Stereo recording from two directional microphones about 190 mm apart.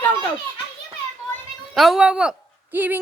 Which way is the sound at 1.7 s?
Centre (ahead or behind).